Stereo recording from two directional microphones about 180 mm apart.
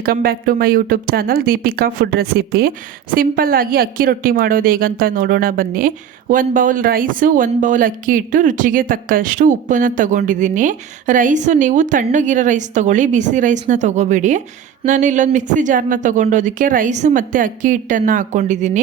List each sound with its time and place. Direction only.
0.0 s speech: 55° right (ahead or behind)